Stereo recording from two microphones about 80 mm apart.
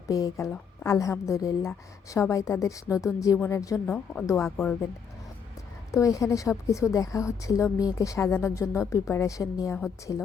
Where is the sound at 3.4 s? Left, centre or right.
Left.